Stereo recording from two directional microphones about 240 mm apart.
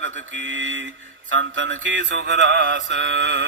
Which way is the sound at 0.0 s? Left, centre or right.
Right.